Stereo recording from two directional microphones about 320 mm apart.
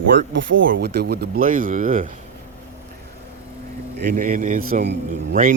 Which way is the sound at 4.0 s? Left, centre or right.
Right.